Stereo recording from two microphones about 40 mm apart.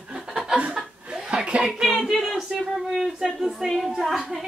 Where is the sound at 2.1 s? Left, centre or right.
Centre.